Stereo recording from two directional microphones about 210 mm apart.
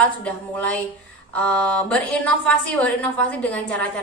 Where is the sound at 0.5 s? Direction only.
5° left (ahead or behind).